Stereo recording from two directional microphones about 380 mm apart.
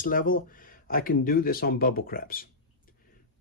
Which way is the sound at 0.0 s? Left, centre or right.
Left.